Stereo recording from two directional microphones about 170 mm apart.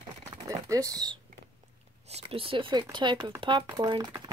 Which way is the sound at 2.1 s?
35° right (ahead or behind).